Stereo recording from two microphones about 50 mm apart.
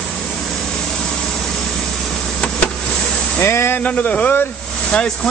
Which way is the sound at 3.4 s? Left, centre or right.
Left.